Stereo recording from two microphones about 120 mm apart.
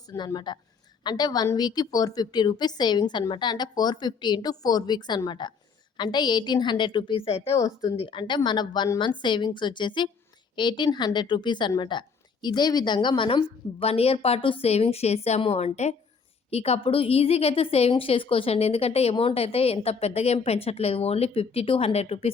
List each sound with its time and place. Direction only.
0.1 s speech: 25° left (ahead or behind)
0.3 s speech: 40° left (ahead or behind)
7.5 s speech: 30° left (ahead or behind)
7.9 s a woman's voice: 45° left (ahead or behind)